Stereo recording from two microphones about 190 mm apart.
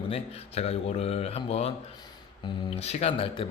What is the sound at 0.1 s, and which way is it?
Speech, 30° left (ahead or behind).